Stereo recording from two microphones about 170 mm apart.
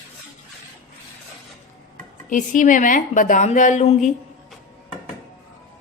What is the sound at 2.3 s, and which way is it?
A woman's voice, 50° left (ahead or behind).